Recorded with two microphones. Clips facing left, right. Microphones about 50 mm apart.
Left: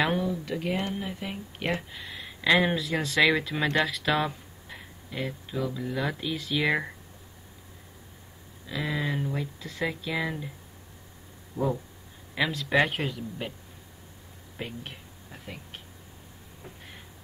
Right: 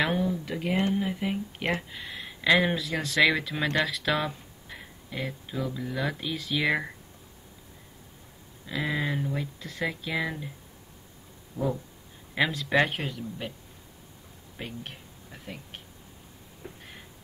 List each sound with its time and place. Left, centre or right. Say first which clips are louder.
0.0 s speech: even; centre
3.8 s a sound: left 1 dB; centre
5.6 s speech: left 1 dB; centre
8.6 s speech: right 1 dB; centre
11.5 s a sound: left 1 dB; centre
12.4 s speech: even; centre
15.3 s speech: right 1 dB; centre